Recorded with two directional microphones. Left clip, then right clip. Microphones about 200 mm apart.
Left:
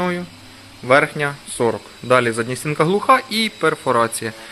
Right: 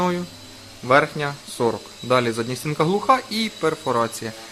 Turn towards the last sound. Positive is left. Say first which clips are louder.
# left 5 dB
turn(degrees=15)  # may be behind; listen again after turning